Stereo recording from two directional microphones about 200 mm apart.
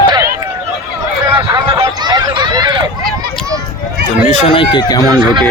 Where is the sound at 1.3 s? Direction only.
20° right (ahead or behind).